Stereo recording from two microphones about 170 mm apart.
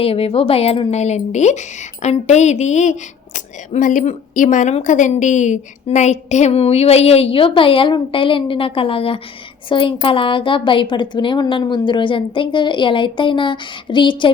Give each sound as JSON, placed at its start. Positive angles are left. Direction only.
{"t": 0.0, "sound": "speech", "side_deg": 35}